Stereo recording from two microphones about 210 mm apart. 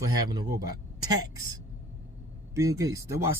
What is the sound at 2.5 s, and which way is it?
Speech, 15° right (ahead or behind).